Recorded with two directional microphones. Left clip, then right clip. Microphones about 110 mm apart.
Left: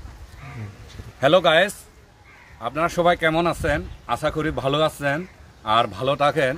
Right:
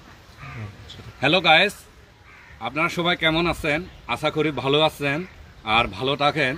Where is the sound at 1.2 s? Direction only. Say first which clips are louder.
Left 1 dB; 40° left (ahead or behind).